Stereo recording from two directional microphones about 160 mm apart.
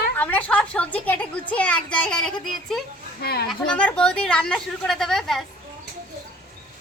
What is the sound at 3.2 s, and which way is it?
Speech, 75° left (ahead or behind).